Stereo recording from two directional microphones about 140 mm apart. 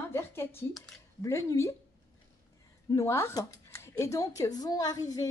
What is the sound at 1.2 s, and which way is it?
Speech, 20° left (ahead or behind).